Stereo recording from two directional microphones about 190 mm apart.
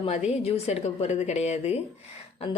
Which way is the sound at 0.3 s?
35° left (ahead or behind).